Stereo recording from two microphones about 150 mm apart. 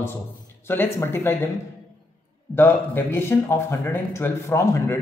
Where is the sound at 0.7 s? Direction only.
15° left (ahead or behind).